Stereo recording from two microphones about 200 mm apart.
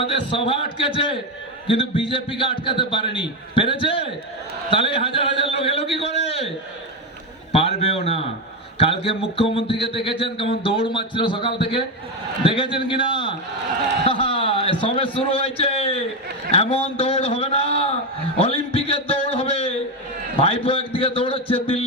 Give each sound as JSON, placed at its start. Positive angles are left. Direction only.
{"t": 0.0, "sound": "speech", "side_deg": 25}
{"t": 7.5, "sound": "a man's voice", "side_deg": 30}
{"t": 18.3, "sound": "a sound", "side_deg": 30}
{"t": 20.4, "sound": "a man's voice", "side_deg": 30}